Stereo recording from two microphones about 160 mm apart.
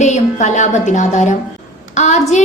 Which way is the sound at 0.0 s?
45° left (ahead or behind).